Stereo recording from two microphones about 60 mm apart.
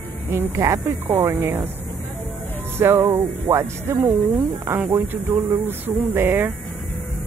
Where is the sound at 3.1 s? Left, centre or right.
Right.